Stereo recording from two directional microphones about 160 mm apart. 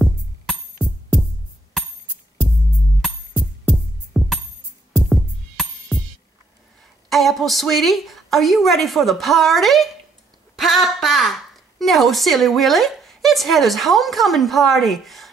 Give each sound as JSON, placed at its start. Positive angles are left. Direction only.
{"t": 5.1, "sound": "music", "side_deg": 0}
{"t": 7.1, "sound": "a woman's voice", "side_deg": 0}